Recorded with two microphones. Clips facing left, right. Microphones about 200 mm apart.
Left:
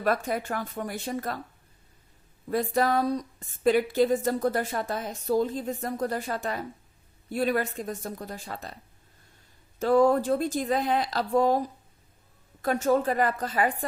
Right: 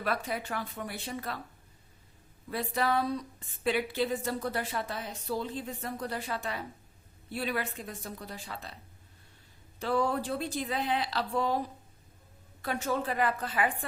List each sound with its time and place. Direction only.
0.0 s speech: 45° left (ahead or behind)
2.5 s speech: 45° left (ahead or behind)
12.6 s speech: 45° left (ahead or behind)